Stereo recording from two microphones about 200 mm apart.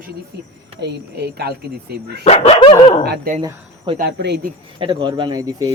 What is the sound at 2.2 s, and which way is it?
Speech, 30° left (ahead or behind).